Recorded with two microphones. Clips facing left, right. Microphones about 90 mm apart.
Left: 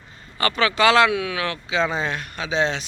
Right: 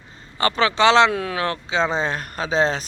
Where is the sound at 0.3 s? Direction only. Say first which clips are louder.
Right 2 dB; 30° right (ahead or behind).